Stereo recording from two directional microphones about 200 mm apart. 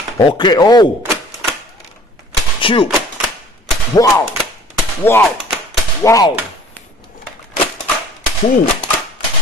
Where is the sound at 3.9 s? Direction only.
15° left (ahead or behind).